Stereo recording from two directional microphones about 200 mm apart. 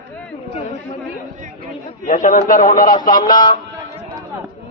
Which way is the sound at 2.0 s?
40° left (ahead or behind).